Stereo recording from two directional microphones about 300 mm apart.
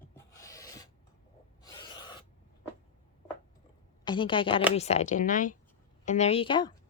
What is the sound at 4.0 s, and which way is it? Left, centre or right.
A woman's voice, centre.